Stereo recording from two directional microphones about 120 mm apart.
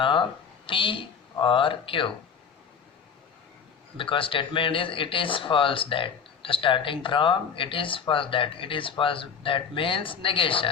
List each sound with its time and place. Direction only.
0.0 s speech: 45° left (ahead or behind)
3.9 s speech: 45° left (ahead or behind)